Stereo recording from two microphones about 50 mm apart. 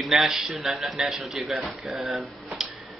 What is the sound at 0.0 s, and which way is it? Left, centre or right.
Speech, centre.